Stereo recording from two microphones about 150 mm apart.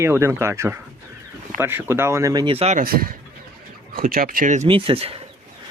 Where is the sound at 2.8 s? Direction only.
75° right (ahead or behind).